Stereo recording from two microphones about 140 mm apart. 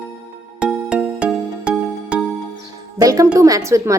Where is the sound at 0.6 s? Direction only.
5° right (ahead or behind).